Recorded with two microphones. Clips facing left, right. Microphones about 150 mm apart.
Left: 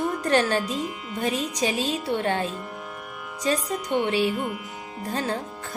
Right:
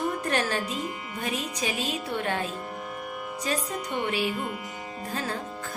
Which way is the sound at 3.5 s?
30° left (ahead or behind).